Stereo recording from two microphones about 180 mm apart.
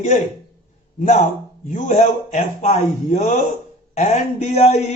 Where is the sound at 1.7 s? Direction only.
40° left (ahead or behind).